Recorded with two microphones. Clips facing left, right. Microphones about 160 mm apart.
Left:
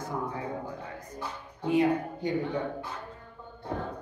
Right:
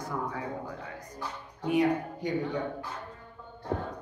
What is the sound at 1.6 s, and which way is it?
Speech, 25° left (ahead or behind).